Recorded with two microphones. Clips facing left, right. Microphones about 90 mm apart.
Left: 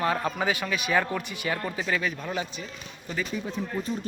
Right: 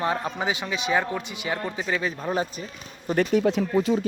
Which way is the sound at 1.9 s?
30° right (ahead or behind).